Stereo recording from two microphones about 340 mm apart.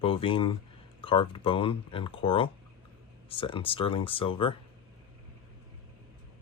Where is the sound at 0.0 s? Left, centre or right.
Centre.